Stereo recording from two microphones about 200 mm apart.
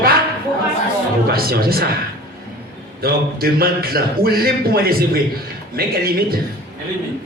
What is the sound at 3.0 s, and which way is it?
A man's voice, 50° right (ahead or behind).